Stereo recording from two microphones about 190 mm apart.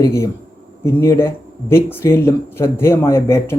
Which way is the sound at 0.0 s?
15° left (ahead or behind).